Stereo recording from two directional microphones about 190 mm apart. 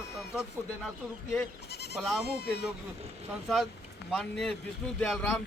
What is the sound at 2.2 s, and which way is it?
Speech, 60° left (ahead or behind).